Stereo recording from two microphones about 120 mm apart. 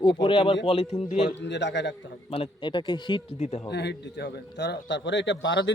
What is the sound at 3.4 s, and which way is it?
Speech, 65° left (ahead or behind).